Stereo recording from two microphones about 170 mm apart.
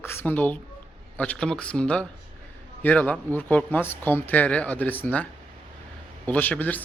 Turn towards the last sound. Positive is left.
turn(degrees=10)  # may be behind; listen again after turning